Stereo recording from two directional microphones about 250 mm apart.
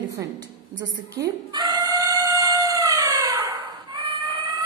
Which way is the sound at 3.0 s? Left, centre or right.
Centre.